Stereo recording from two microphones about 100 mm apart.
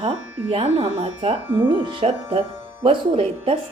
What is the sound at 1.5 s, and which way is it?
Speech, 60° right (ahead or behind).